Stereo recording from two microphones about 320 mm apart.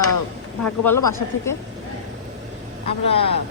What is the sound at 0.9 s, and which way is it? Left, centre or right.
Speech, centre.